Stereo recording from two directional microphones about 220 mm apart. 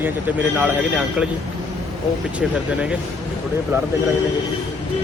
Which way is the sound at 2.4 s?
Centre (ahead or behind).